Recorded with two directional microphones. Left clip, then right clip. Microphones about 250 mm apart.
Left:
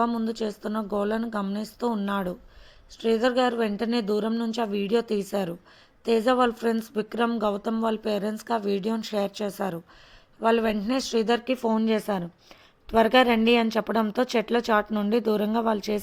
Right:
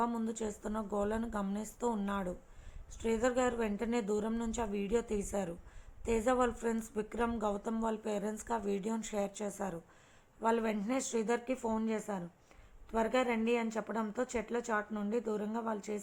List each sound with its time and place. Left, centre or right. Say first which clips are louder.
0.0 s speech: left 9 dB; left